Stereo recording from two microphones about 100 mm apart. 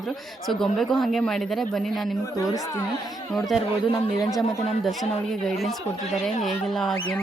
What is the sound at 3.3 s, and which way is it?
Speech, centre (ahead or behind).